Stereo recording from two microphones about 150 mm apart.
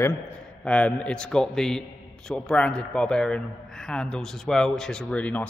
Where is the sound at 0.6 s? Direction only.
5° left (ahead or behind).